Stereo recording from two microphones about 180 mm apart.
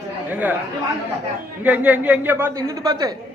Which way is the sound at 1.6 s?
10° right (ahead or behind).